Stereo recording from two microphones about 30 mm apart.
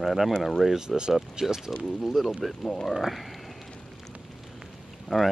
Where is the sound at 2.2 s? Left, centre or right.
Centre.